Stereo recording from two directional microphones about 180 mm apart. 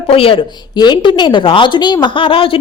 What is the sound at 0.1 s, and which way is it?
Speech, 30° left (ahead or behind).